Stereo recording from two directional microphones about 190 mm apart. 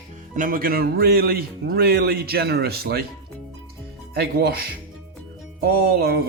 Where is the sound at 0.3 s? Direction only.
45° right (ahead or behind).